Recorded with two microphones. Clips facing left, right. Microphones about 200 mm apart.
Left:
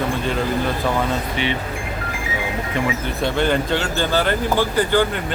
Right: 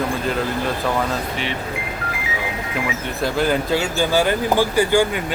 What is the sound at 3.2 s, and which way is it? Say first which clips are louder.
Speech: even; 5° right (ahead or behind).